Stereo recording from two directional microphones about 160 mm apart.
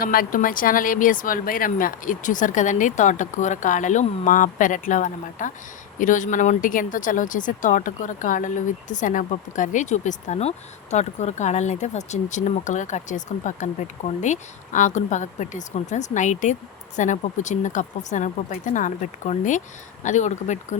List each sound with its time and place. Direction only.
0.0 s a woman's voice: 65° left (ahead or behind); by 20.7 s 50° left (ahead or behind)